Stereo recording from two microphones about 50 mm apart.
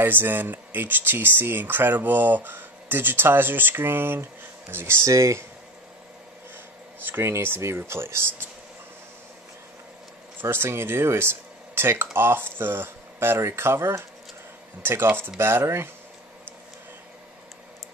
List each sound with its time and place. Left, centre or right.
0.0 s speech: right
7.1 s speech: right
7.3 s speech: right
10.4 s speech: right
13.4 s speech: right
14.8 s speech: right